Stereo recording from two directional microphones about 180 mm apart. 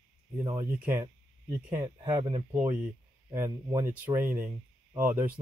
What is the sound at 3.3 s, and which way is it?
Speech, 15° right (ahead or behind).